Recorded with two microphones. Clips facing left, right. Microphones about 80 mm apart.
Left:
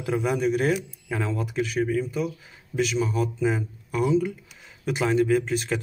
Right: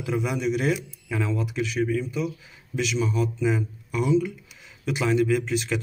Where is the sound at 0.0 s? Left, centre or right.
Left.